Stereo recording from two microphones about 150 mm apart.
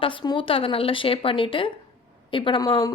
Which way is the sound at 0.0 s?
35° left (ahead or behind).